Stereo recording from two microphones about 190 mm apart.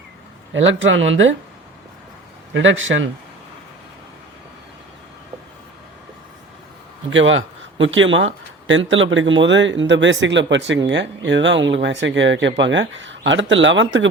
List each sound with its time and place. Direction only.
0.5 s speech: 85° right
2.5 s speech: 85° right
7.1 s speech: 90° right